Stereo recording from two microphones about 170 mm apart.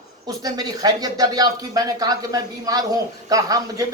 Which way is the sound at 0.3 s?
20° right (ahead or behind).